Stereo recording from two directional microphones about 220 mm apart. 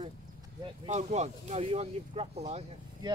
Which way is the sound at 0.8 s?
30° right (ahead or behind).